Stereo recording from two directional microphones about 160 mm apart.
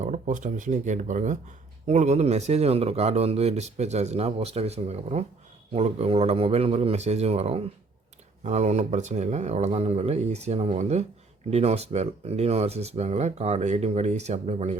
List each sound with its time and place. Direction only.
0.0 s speech: 50° right (ahead or behind)